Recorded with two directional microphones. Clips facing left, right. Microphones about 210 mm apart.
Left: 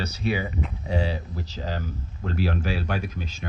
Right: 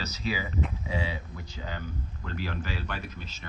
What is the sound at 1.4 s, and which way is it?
Speech, 80° left.